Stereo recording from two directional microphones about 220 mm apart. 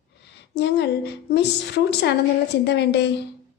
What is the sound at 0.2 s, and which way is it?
A woman's voice, 50° left (ahead or behind).